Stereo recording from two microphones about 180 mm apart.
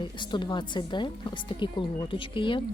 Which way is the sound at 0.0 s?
25° left (ahead or behind).